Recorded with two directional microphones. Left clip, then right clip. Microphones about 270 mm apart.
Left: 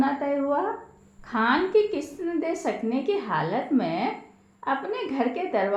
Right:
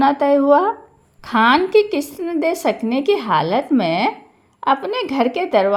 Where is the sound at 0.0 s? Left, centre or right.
Right.